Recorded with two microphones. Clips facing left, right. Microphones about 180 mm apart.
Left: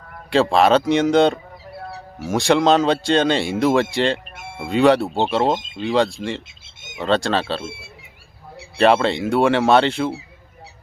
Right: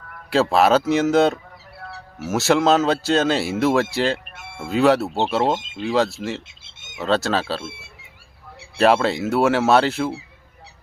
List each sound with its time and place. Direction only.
0.3 s speech: 5° right (ahead or behind)
8.8 s speech: 5° right (ahead or behind)